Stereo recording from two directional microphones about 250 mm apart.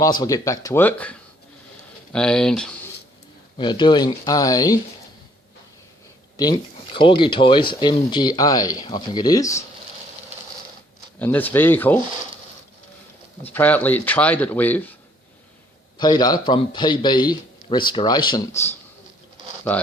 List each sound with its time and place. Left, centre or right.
0.0 s speech: centre
2.1 s speech: centre
3.6 s speech: centre
6.3 s speech: centre
11.2 s speech: centre
13.4 s speech: centre
16.0 s speech: centre